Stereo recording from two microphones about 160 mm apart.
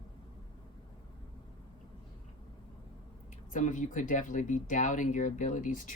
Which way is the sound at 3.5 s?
50° left (ahead or behind).